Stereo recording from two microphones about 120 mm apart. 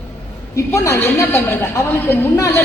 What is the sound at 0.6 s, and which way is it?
A woman's voice, 25° left (ahead or behind).